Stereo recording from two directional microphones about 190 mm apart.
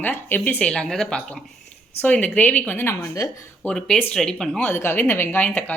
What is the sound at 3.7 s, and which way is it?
Speech, 5° left (ahead or behind).